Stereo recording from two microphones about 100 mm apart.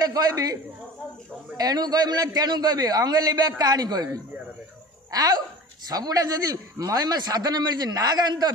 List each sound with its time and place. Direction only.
0.0 s a man's voice: 40° right (ahead or behind)
1.6 s a man's voice: 40° right (ahead or behind)